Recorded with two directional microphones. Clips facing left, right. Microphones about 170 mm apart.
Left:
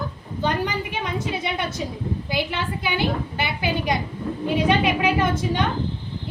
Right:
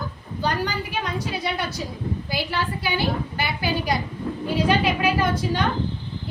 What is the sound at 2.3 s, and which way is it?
A woman's voice, 20° left (ahead or behind).